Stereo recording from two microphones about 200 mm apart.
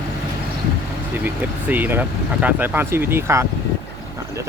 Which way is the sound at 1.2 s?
10° right (ahead or behind).